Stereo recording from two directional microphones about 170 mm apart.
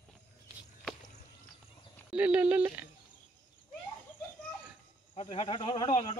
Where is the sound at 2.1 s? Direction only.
10° right (ahead or behind).